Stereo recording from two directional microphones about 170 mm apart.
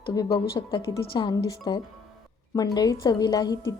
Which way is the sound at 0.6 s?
25° left (ahead or behind).